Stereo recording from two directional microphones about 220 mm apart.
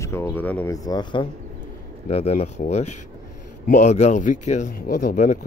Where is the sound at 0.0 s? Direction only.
10° left (ahead or behind).